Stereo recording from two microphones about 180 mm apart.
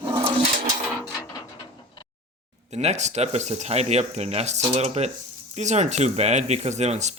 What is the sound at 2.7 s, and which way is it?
Speech, 40° right (ahead or behind).